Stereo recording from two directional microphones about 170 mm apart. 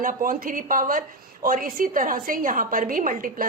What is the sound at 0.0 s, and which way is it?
A woman's voice, 55° right (ahead or behind).